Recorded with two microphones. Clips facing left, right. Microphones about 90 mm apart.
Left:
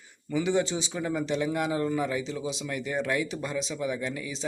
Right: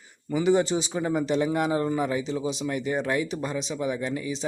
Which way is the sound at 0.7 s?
30° right (ahead or behind).